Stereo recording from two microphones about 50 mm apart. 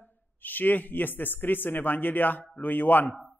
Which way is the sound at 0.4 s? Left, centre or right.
Left.